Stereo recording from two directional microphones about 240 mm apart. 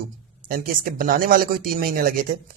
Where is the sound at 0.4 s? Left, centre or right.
Right.